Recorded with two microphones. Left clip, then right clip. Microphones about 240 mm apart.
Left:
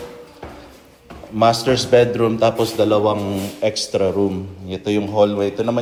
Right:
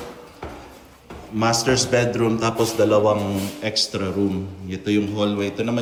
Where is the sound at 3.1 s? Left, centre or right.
Left.